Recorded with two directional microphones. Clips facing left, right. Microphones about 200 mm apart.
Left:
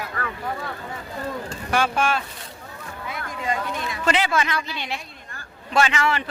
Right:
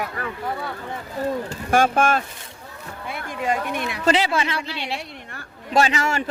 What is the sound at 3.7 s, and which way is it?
Speech, 65° right (ahead or behind).